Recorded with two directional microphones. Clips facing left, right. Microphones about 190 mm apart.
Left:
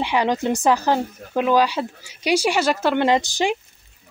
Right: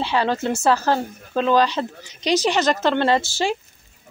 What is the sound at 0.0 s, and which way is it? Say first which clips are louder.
Speech: left 1 dB; 15° left (ahead or behind).